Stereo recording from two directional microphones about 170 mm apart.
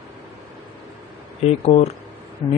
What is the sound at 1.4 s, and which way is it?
Speech, 40° left (ahead or behind).